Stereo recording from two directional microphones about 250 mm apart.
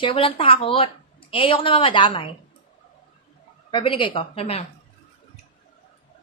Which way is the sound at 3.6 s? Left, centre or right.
Centre.